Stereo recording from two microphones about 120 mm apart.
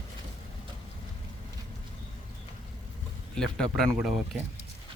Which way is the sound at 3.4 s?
5° left (ahead or behind).